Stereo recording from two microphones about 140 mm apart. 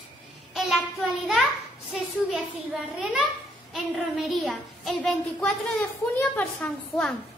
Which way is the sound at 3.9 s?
Centre (ahead or behind).